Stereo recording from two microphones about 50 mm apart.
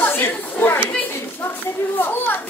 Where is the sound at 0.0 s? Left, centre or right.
Left.